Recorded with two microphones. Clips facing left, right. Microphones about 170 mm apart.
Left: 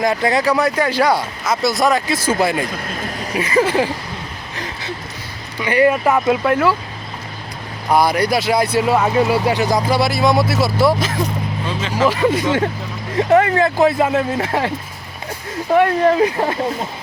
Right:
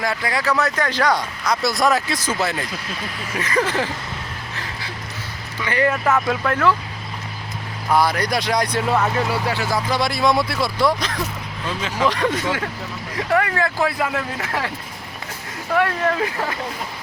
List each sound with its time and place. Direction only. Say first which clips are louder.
0.0 s speech: left 7 dB; 20° left (ahead or behind); by 2.1 s centre (ahead or behind)
2.6 s speech: left 5 dB; 50° left (ahead or behind)
3.3 s speech: left 5 dB; 10° left (ahead or behind)
4.5 s a sound: left 6 dB; 20° left (ahead or behind)
5.5 s speech: left 6 dB; 15° left (ahead or behind)
7.9 s speech: left 4 dB; 15° left (ahead or behind)
9.9 s speech: left 1 dB; 5° left (ahead or behind)
12.5 s speech: left 6 dB; 30° left (ahead or behind)
15.7 s speech: left 6 dB; 25° left (ahead or behind)